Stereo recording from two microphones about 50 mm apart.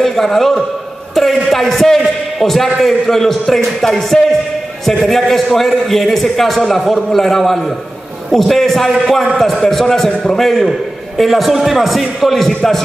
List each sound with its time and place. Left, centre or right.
0.0 s a man's voice: centre